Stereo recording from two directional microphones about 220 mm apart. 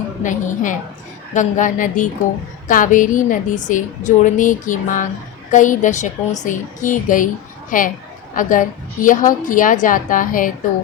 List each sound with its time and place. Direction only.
0.2 s a woman's voice: 35° left (ahead or behind)